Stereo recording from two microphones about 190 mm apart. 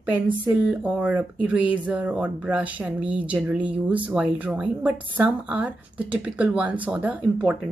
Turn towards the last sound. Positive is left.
turn(degrees=-5)  # may be behind; listen again after turning